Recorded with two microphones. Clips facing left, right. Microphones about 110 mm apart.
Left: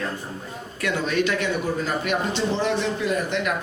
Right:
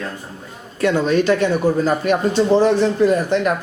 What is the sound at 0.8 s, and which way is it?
Speech, 35° right (ahead or behind).